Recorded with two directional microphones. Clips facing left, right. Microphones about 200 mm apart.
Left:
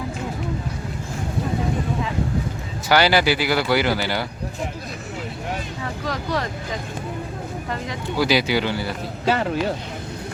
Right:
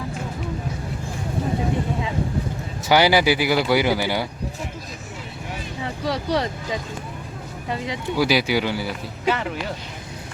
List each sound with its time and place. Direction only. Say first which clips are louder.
2.9 s speech: right 1 dB; 15° right (ahead or behind)
5.8 s speech: right 6 dB; 20° right (ahead or behind)
8.2 s speech: even; 10° right (ahead or behind)
9.2 s speech: left 2 dB; 40° left (ahead or behind)